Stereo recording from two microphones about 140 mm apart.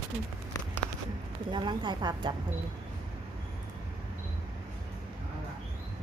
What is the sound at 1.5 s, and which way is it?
Speech, 35° right (ahead or behind).